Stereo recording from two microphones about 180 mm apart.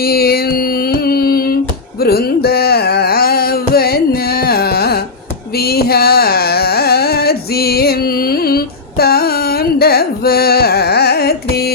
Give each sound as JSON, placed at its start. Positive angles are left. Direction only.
{"t": 0.0, "sound": "music", "side_deg": 55}
{"t": 2.0, "sound": "carnatic music", "side_deg": 60}
{"t": 5.5, "sound": "a sound", "side_deg": 60}